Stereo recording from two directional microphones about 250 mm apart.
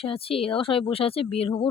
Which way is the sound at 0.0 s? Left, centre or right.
Left.